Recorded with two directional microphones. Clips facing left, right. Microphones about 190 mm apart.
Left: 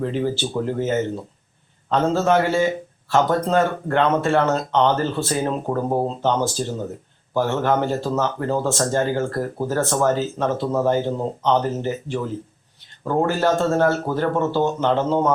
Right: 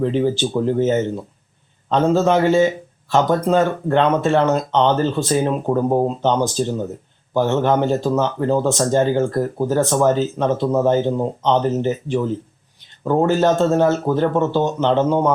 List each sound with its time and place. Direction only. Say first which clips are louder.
0.0 s speech: right 5 dB; 20° right (ahead or behind)